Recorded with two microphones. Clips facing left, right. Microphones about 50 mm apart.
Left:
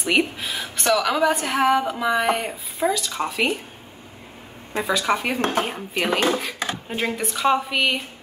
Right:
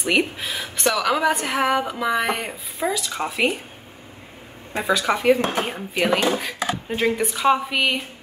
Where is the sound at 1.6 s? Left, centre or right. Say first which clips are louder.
Left 3 dB; centre.